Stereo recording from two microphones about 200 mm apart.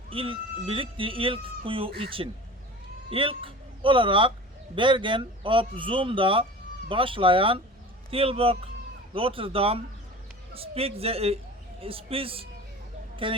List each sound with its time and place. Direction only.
0.1 s speech: 25° right (ahead or behind)